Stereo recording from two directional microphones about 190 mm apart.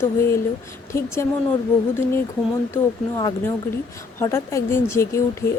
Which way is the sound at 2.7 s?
15° left (ahead or behind).